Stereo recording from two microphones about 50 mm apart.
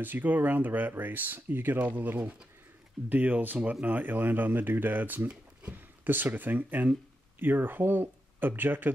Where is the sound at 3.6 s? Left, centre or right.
Right.